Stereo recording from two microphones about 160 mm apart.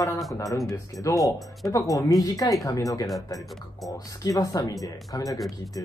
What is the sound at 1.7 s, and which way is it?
Speech, 20° left (ahead or behind).